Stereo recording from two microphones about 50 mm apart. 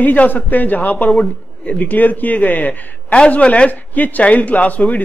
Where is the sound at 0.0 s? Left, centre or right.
Left.